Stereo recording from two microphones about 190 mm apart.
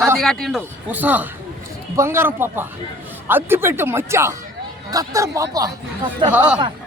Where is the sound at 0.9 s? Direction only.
10° right (ahead or behind).